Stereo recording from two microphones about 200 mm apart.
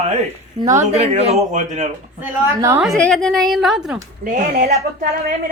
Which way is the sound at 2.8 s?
Centre (ahead or behind).